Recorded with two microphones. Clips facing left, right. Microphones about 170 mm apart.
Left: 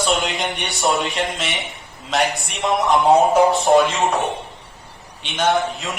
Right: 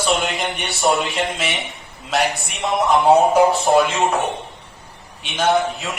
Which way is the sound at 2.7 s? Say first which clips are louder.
Right 1 dB; centre (ahead or behind).